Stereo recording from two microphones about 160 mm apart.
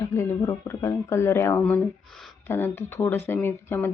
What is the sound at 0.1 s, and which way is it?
Speech, 20° left (ahead or behind).